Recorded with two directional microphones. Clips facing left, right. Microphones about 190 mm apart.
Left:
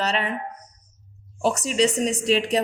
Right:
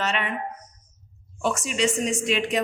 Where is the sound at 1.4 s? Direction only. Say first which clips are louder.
Left 3 dB; 35° left (ahead or behind).